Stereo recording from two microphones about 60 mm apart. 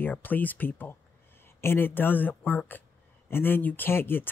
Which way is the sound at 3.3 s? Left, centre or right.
Left.